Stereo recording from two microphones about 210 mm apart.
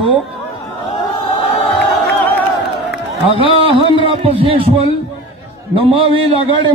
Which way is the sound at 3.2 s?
25° right (ahead or behind).